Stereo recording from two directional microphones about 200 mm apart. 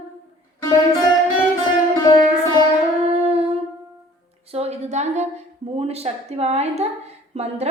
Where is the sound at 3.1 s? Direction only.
30° right (ahead or behind).